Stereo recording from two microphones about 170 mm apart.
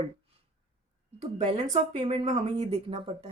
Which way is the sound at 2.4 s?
35° right (ahead or behind).